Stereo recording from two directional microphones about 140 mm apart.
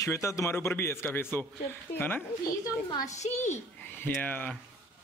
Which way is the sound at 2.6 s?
25° left (ahead or behind).